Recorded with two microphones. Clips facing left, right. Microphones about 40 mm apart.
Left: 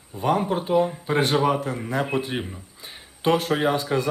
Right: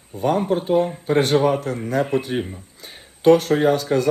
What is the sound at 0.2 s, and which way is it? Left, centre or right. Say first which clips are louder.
Speech: right 2 dB; centre.